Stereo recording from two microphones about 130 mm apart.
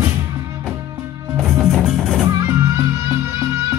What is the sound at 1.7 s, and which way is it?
Music, centre (ahead or behind).